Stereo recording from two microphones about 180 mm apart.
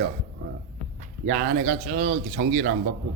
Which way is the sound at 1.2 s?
90° right.